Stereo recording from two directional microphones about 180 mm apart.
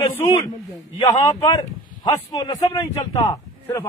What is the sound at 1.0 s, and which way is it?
A man's voice, 20° left (ahead or behind).